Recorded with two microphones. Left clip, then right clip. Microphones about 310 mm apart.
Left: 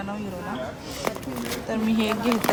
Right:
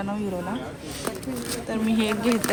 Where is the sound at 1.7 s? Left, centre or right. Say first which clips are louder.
Even; centre.